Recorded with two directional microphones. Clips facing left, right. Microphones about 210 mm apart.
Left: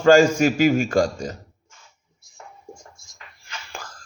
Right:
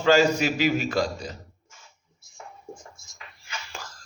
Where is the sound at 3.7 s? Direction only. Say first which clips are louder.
Left 5 dB; 55° left (ahead or behind).